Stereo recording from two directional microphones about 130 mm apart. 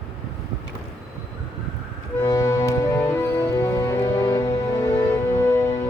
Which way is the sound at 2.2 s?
25° left (ahead or behind).